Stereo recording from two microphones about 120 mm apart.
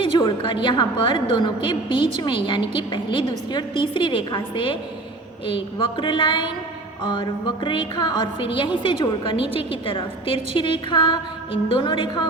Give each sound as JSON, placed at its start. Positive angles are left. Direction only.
{"t": 0.0, "sound": "a woman's voice", "side_deg": 40}